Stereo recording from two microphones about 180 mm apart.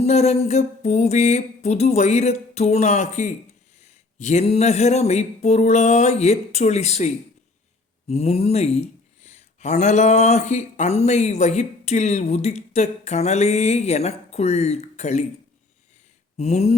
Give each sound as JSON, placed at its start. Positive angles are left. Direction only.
{"t": 0.0, "sound": "speech", "side_deg": 35}
{"t": 16.4, "sound": "speech", "side_deg": 35}